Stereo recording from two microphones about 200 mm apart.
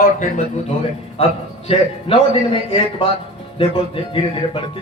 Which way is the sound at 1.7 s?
25° left (ahead or behind).